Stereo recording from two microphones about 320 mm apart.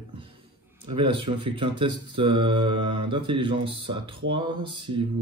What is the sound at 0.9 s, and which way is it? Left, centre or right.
Speech, centre.